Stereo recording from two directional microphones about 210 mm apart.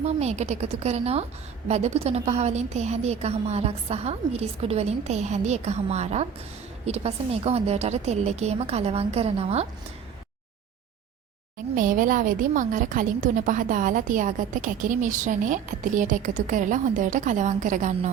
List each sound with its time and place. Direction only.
0.0 s a woman's voice: 30° right (ahead or behind)
11.7 s a woman's voice: 40° right (ahead or behind)